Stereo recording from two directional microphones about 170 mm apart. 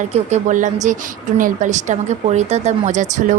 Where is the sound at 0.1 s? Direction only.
45° right (ahead or behind).